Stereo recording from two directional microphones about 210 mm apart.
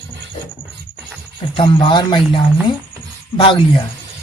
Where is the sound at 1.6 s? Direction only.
20° left (ahead or behind).